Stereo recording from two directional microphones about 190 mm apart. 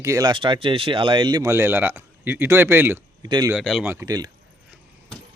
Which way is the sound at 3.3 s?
20° right (ahead or behind).